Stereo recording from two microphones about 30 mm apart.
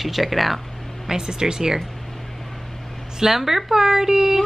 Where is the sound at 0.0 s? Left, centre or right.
Centre.